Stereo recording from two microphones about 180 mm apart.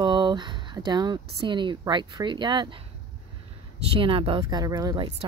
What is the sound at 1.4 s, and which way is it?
A woman's voice, 25° right (ahead or behind).